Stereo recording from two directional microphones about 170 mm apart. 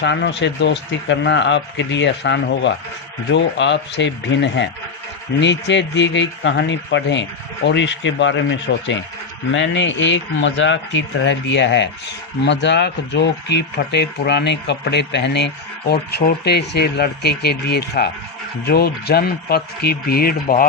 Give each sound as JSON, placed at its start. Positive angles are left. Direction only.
{"t": 0.0, "sound": "speech", "side_deg": 90}